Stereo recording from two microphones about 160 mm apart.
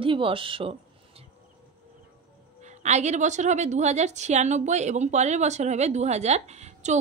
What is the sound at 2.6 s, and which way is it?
A woman's voice, 45° right (ahead or behind).